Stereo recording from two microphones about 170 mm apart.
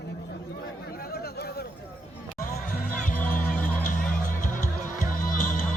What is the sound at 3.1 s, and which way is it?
Music, 10° left (ahead or behind).